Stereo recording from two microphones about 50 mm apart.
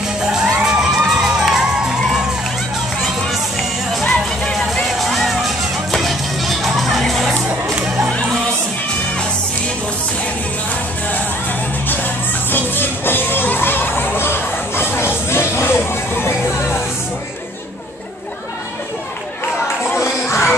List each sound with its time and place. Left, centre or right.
0.6 s children shouting: centre
1.0 s music: centre
4.9 s music: centre
11.9 s music: left
20.0 s crowd: left